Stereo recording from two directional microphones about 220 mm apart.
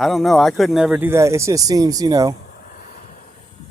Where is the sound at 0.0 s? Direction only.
Centre (ahead or behind); by 2.3 s 15° right (ahead or behind).